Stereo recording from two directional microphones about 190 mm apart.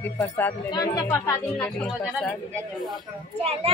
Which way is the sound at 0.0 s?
10° left (ahead or behind).